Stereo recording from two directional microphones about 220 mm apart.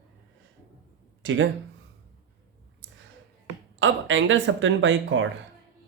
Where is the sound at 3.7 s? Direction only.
60° right (ahead or behind).